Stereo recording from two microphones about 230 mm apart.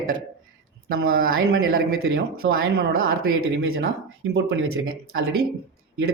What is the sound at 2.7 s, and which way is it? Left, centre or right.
A man's voice, right.